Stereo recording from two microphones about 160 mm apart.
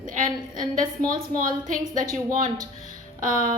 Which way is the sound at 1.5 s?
55° right (ahead or behind).